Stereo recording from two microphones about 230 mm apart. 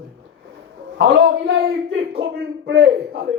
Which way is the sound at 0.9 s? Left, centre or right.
Right.